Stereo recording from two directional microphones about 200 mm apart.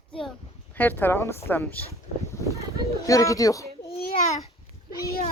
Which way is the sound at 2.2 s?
15° left (ahead or behind).